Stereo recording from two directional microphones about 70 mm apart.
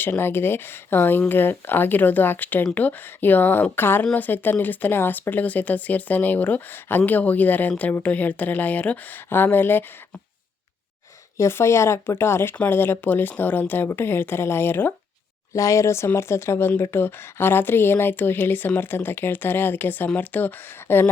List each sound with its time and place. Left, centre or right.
0.0 s speech: left
11.3 s speech: left
15.5 s speech: left